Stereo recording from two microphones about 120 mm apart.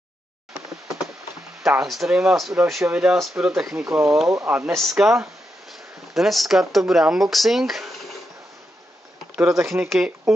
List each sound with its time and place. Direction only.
1.6 s speech: 5° right (ahead or behind)
4.5 s speech: 15° right (ahead or behind)
4.7 s speech: centre (ahead or behind)
9.4 s speech: 20° right (ahead or behind)
9.8 s speech: 5° right (ahead or behind)